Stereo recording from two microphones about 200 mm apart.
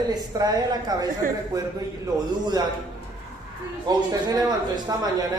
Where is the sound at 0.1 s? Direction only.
20° right (ahead or behind).